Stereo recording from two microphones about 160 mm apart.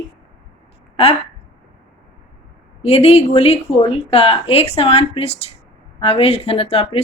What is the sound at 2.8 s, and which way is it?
Speech, 40° left (ahead or behind).